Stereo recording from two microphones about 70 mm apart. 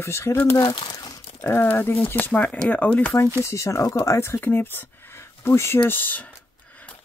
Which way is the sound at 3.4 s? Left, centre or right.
Left.